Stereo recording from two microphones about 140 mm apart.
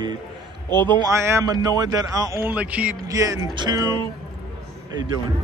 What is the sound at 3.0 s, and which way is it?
Speech, 25° right (ahead or behind).